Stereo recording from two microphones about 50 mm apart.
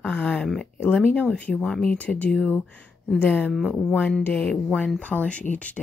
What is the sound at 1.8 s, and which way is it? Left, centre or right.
Speech, left.